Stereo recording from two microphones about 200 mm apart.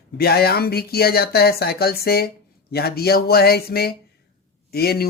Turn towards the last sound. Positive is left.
turn(degrees=50)  # may be behind; listen again after turning